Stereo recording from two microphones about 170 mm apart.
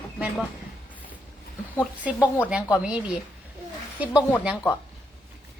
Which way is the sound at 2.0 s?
10° right (ahead or behind).